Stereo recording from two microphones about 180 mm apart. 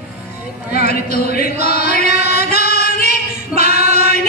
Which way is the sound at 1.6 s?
60° left (ahead or behind).